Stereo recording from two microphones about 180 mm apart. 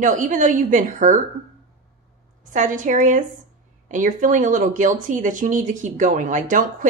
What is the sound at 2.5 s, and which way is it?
A woman's voice, 45° right (ahead or behind).